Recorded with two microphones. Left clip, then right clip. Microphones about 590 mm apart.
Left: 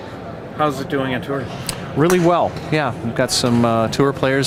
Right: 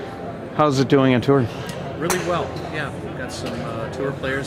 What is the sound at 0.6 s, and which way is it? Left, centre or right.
Speech, right.